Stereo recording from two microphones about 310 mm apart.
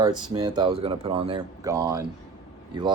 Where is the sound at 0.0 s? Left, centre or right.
Centre.